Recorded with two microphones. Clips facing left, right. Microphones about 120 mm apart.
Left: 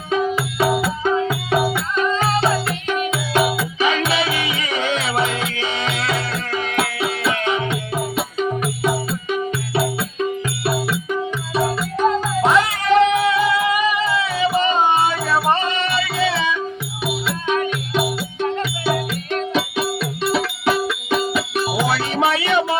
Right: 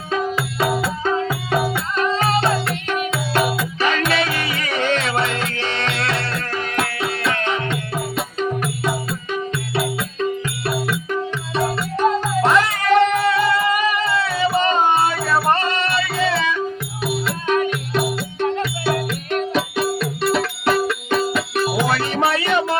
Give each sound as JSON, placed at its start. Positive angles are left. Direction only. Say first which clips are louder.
{"t": 0.1, "sound": "music", "louder": "left 2 dB", "side_deg": 15}
{"t": 11.1, "sound": "music", "louder": "left 1 dB", "side_deg": 5}